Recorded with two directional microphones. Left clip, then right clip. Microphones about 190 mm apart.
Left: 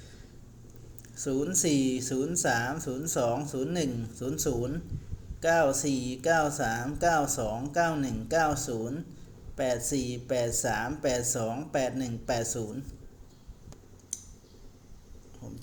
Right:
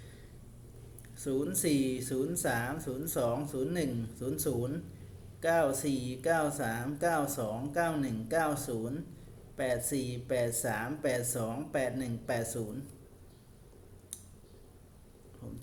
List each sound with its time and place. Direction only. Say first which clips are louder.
1.1 s speech: left 4 dB; 15° left (ahead or behind)